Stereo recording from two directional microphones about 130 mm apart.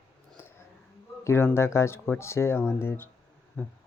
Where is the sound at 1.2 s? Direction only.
20° left (ahead or behind).